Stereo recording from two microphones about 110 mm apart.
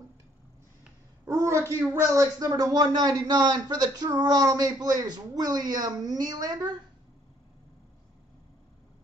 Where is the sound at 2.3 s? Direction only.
35° right (ahead or behind).